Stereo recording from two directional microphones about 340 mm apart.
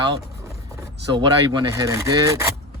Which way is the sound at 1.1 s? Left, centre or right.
Centre.